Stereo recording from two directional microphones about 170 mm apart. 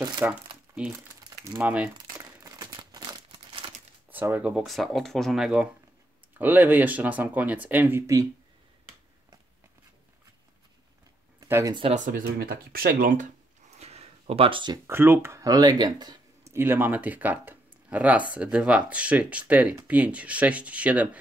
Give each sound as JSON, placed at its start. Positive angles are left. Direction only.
{"t": 0.2, "sound": "speech", "side_deg": -10}
{"t": 2.0, "sound": "crumpling", "side_deg": -20}
{"t": 4.1, "sound": "speech", "side_deg": -10}
{"t": 11.3, "sound": "a sound", "side_deg": -15}
{"t": 11.9, "sound": "speech", "side_deg": -50}
{"t": 13.7, "sound": "a sound", "side_deg": -40}
{"t": 14.9, "sound": "speech", "side_deg": -15}
{"t": 16.5, "sound": "speech", "side_deg": -15}